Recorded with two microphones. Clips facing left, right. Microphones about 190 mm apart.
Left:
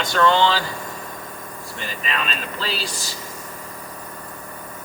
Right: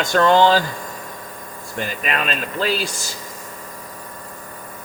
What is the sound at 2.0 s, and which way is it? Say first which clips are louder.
Speech: right 2 dB; 55° right (ahead or behind).